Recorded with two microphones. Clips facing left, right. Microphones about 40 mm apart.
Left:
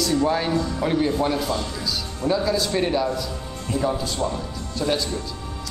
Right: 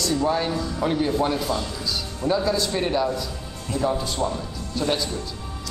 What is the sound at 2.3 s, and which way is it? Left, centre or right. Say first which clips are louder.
Speech: left 1 dB; centre.